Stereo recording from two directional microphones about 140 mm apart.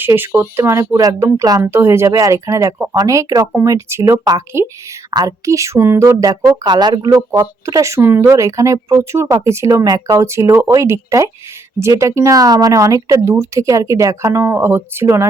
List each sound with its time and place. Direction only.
0.0 s speech: 15° right (ahead or behind)